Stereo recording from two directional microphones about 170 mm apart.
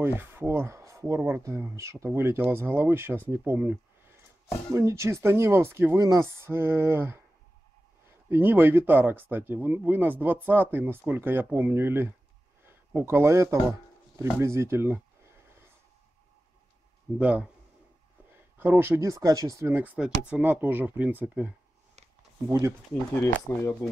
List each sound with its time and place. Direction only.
0.0 s speech: 10° right (ahead or behind)
8.3 s speech: 10° right (ahead or behind)
14.1 s a sound: 15° right (ahead or behind)
17.2 s speech: 10° right (ahead or behind)
18.6 s speech: 10° right (ahead or behind)
23.2 s speech: 15° left (ahead or behind)